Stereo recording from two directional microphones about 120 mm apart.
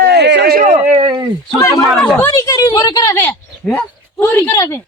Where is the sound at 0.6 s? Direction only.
90° right.